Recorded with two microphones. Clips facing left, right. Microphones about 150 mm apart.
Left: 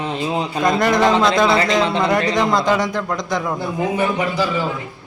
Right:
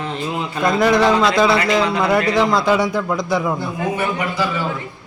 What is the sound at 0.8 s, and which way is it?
A man's voice, centre (ahead or behind).